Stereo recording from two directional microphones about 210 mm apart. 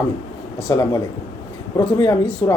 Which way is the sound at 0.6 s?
15° left (ahead or behind).